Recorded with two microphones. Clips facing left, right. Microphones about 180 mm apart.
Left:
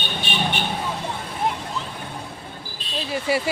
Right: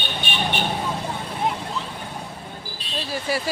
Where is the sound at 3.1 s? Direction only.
25° left (ahead or behind).